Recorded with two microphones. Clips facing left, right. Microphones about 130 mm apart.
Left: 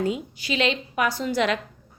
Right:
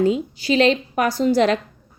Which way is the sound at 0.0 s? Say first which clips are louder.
Right 7 dB; 30° right (ahead or behind).